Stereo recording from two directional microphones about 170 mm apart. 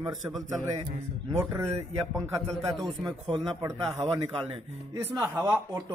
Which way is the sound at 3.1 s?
25° right (ahead or behind).